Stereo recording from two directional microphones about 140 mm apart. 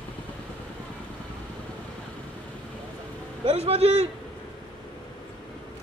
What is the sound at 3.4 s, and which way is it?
Speech, 45° right (ahead or behind).